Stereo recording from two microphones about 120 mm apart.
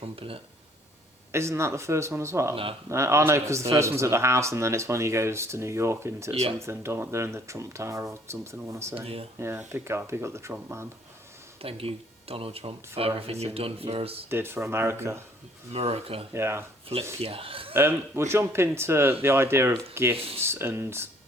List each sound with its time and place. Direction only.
0.0 s a sound: 50° right (ahead or behind)
1.3 s speech: 20° right (ahead or behind)
9.0 s speech: 55° right (ahead or behind)
9.4 s speech: 20° right (ahead or behind)
11.6 s speech: 55° right (ahead or behind)
14.3 s speech: 20° right (ahead or behind)
15.7 s speech: 55° right (ahead or behind)
16.3 s speech: 20° right (ahead or behind)
17.2 s speech: 50° right (ahead or behind)
17.7 s speech: 20° right (ahead or behind)